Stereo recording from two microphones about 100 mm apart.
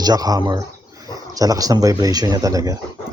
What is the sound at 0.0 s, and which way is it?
Speech, 40° right (ahead or behind).